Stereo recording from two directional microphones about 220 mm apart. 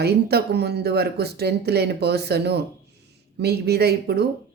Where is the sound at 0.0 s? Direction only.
45° right (ahead or behind).